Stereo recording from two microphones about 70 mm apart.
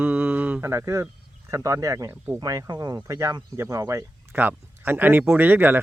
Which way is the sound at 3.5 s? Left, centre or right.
Right.